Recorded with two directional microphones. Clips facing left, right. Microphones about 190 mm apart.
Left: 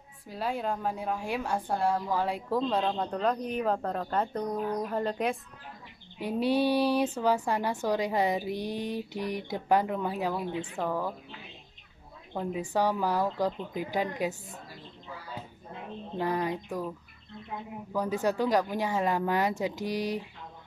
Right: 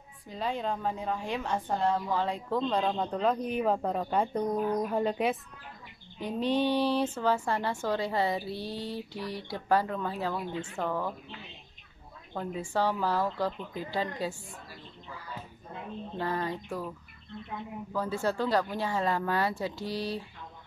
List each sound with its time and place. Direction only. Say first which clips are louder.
0.3 s a woman's voice: left 1 dB; 5° left (ahead or behind)
6.1 s a woman's voice: left 2 dB; 10° left (ahead or behind)
12.4 s a woman's voice: left 2 dB; 15° left (ahead or behind)
16.2 s a woman's voice: left 3 dB; 15° left (ahead or behind)
17.9 s a woman's voice: left 2 dB; 15° left (ahead or behind)